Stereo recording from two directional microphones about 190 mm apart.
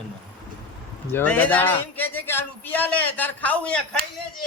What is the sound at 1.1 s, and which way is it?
A man's voice, 10° left (ahead or behind).